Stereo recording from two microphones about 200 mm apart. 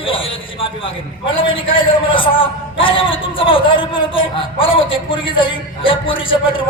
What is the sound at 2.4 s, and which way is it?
A man's voice, 25° left (ahead or behind).